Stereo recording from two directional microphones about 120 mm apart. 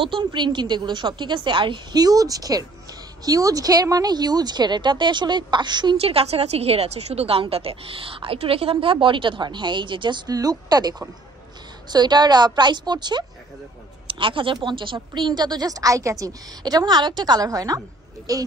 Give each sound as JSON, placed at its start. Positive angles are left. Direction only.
{"t": 0.0, "sound": "a woman's voice", "side_deg": -40}
{"t": 5.9, "sound": "a woman's voice", "side_deg": -55}